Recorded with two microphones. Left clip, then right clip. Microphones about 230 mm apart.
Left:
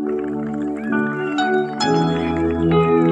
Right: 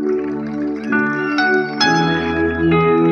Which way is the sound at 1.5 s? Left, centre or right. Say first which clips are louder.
Right 3 dB; left.